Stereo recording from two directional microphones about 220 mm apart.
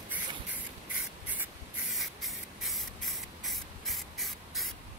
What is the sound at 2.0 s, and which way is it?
Spray, centre (ahead or behind).